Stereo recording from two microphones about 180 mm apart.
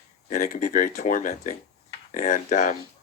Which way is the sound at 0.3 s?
45° left (ahead or behind).